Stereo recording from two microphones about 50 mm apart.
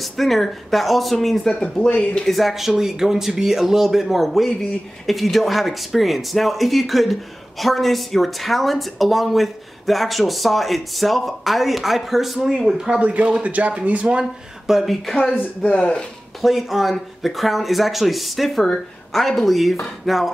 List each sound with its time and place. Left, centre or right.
0.0 s speech: centre
1.8 s speech: centre
2.2 s speech: centre
13.0 s speech: right
14.7 s speech: centre
15.4 s speech: left
16.3 s speech: centre